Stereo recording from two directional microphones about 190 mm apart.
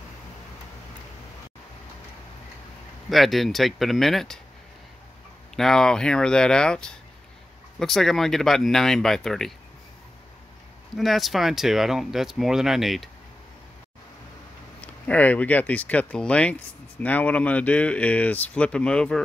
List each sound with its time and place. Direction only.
3.1 s speech: centre (ahead or behind)
5.6 s speech: 5° left (ahead or behind)
11.0 s speech: centre (ahead or behind)
14.8 s speech: 10° left (ahead or behind)